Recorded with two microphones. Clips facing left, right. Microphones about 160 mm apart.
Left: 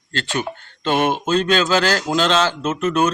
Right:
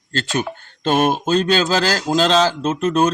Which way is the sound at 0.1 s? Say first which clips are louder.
Right 2 dB; 40° right (ahead or behind).